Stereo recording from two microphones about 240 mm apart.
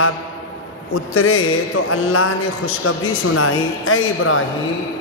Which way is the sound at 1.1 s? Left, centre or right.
Left.